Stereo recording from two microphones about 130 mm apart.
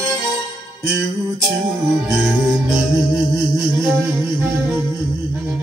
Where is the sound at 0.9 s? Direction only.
Centre (ahead or behind).